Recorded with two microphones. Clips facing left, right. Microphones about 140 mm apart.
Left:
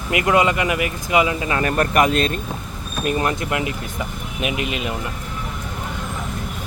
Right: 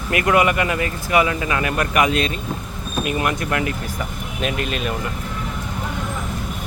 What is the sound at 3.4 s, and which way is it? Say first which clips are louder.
Speech: right 1 dB; 20° left (ahead or behind).